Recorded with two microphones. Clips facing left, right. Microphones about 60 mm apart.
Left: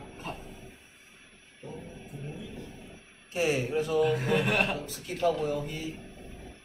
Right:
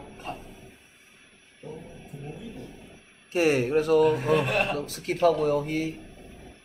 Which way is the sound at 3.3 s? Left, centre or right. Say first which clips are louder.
Right 6 dB; right.